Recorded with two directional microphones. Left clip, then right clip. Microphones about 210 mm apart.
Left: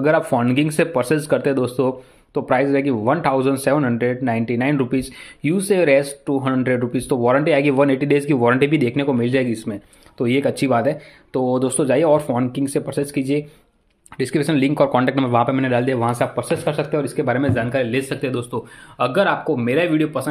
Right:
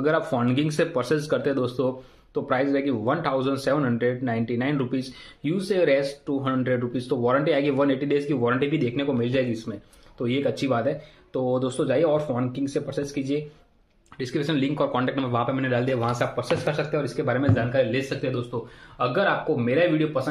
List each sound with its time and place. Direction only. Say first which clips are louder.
0.0 s speech: left 6 dB; 30° left (ahead or behind); by 20.2 s 50° left (ahead or behind)